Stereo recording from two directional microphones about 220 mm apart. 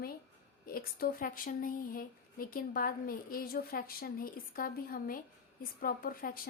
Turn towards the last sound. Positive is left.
turn(degrees=40)  # may be behind; listen again after turning